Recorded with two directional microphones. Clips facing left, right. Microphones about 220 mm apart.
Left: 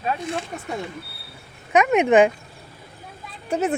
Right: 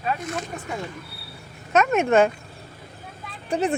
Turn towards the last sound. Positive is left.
turn(degrees=5)  # may be behind; listen again after turning